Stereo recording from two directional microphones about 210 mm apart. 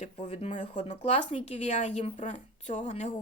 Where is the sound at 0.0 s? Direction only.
30° left (ahead or behind).